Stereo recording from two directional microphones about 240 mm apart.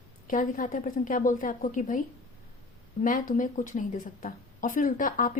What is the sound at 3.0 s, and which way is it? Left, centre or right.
A woman's voice, left.